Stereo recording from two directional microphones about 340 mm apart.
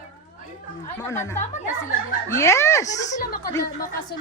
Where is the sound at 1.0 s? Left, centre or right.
Centre.